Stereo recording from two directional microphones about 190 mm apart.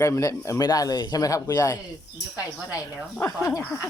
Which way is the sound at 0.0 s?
15° left (ahead or behind).